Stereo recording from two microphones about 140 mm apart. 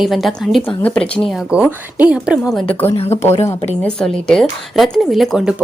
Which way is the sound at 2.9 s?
50° left (ahead or behind).